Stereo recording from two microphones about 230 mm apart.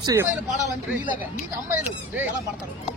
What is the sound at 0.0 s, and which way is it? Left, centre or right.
Speech, centre.